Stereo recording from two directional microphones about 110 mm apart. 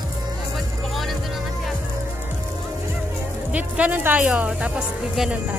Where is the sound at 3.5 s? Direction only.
15° right (ahead or behind).